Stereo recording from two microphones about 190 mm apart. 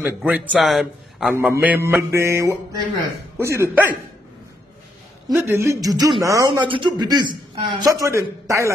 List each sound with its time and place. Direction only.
0.0 s speech: 5° right (ahead or behind)
1.3 s mantra: 10° right (ahead or behind)
5.3 s mantra: 15° right (ahead or behind)
6.2 s a man's voice: 15° right (ahead or behind)